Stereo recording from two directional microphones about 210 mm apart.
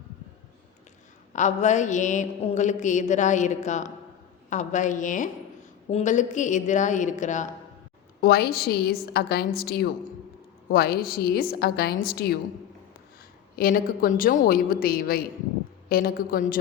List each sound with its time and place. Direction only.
1.3 s mantra: 35° left (ahead or behind)
8.2 s a woman's voice: 50° left (ahead or behind)
13.6 s a woman's voice: 45° left (ahead or behind)